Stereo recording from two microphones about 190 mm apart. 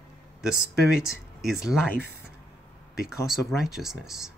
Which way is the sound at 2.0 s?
60° right (ahead or behind).